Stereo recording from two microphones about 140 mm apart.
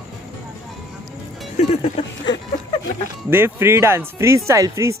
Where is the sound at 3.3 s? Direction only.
15° right (ahead or behind).